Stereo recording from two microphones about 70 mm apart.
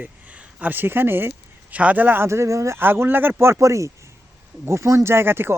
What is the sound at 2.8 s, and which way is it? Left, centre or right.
Speech, right.